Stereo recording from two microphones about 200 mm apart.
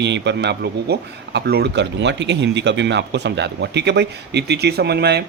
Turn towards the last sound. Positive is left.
turn(degrees=-55)  # may be behind; listen again after turning